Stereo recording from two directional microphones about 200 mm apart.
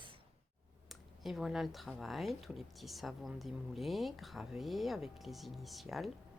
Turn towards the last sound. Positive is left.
turn(degrees=0)  # may be behind; listen again after turning